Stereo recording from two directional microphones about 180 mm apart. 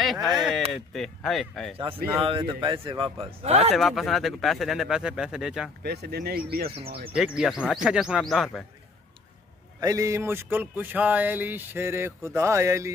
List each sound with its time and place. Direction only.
0.0 s speech: centre (ahead or behind)
2.2 s a man's voice: 30° right (ahead or behind)
3.7 s speech: centre (ahead or behind)
5.9 s speech: 65° right (ahead or behind)
7.2 s speech: 5° right (ahead or behind)
9.8 s speech: 20° right (ahead or behind)